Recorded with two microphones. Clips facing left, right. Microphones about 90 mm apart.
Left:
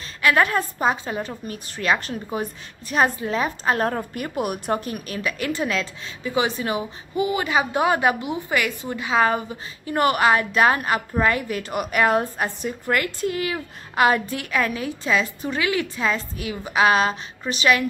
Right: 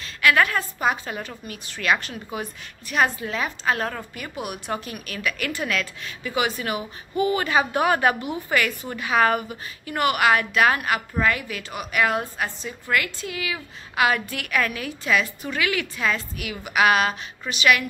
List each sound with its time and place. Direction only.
0.0 s a woman's voice: 30° left (ahead or behind)
4.1 s a woman's voice: 45° left (ahead or behind); by 11.4 s 30° left (ahead or behind)
11.4 s a woman's voice: 45° left (ahead or behind)